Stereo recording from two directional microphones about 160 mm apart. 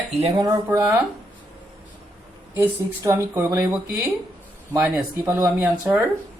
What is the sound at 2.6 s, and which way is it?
Speech, 15° right (ahead or behind).